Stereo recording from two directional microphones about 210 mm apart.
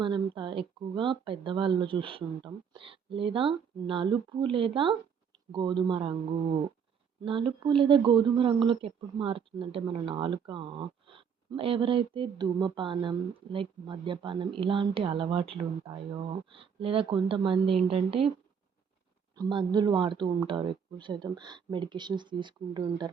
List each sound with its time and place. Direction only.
0.0 s speech: 25° right (ahead or behind)
19.4 s speech: 20° right (ahead or behind)